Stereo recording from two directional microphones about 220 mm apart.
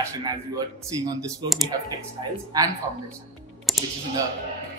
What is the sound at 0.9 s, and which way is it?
Speech, 15° right (ahead or behind).